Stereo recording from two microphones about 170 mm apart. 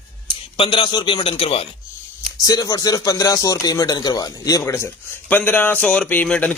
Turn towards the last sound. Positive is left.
turn(degrees=10)  # may be behind; listen again after turning